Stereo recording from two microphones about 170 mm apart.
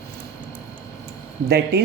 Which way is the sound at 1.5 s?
70° right (ahead or behind).